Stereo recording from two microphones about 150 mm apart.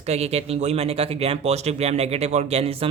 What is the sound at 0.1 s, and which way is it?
Speech, 45° right (ahead or behind).